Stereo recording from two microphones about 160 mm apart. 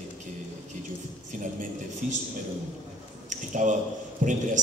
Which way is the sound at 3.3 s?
50° right (ahead or behind).